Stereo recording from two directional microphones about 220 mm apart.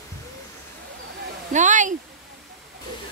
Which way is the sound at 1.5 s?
35° right (ahead or behind).